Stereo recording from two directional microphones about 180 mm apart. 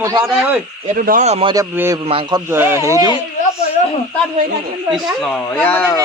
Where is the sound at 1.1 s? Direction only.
40° right (ahead or behind).